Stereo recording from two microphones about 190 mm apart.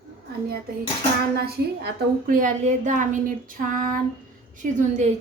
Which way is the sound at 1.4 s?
55° right (ahead or behind).